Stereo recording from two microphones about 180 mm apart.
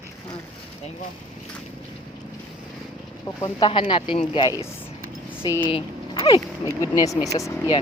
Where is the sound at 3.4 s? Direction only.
30° left (ahead or behind).